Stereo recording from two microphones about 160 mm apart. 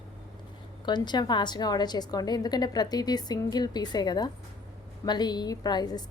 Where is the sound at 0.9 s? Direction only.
25° left (ahead or behind).